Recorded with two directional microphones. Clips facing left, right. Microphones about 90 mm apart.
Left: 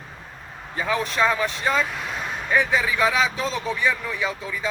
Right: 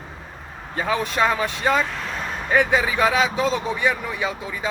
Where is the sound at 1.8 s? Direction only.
5° left (ahead or behind).